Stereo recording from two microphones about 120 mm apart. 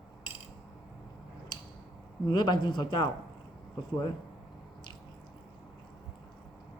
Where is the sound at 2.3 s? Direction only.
40° left (ahead or behind).